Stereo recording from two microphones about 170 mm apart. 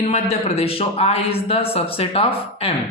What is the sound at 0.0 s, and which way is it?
A man's voice, 35° left (ahead or behind).